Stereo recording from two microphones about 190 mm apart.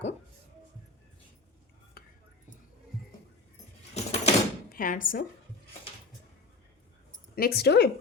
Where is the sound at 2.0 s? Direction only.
55° left (ahead or behind).